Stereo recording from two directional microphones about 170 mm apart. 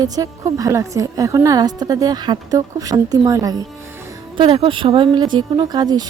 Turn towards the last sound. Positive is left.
turn(degrees=-25)  # may be behind; listen again after turning